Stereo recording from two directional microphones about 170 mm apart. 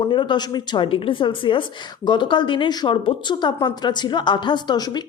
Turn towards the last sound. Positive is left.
turn(degrees=25)  # may be behind; listen again after turning